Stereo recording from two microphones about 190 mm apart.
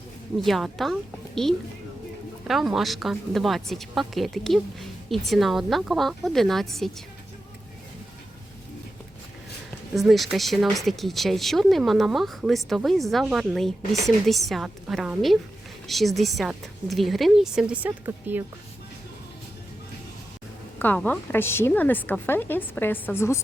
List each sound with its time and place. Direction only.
0.3 s a woman's voice: centre (ahead or behind)
9.9 s a woman's voice: centre (ahead or behind)
20.7 s a woman's voice: 10° left (ahead or behind)